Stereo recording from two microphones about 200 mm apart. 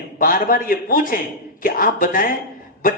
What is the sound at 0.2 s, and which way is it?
Speech, 45° left (ahead or behind).